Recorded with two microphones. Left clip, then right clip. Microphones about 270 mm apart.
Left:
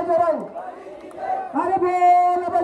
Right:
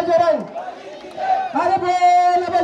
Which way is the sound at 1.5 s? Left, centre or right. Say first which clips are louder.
Left 2 dB; right.